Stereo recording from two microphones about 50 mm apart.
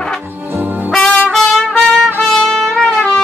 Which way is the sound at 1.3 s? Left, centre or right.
Centre.